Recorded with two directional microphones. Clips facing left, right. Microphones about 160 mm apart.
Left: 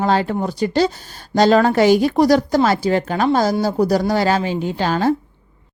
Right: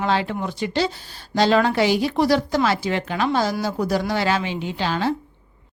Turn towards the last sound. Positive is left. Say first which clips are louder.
# left 5 dB
turn(degrees=45)  # may be behind; listen again after turning